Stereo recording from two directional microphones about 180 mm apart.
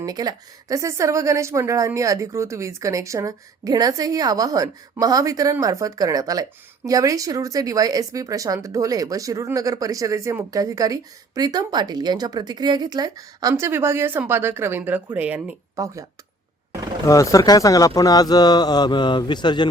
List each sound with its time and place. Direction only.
0.0 s a woman's voice: 20° right (ahead or behind)
17.1 s speech: 20° left (ahead or behind)